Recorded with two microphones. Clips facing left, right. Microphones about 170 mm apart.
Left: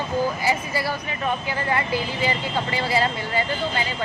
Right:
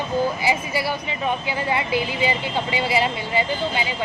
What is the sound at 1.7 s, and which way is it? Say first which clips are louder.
Speech: right 1 dB; 15° right (ahead or behind).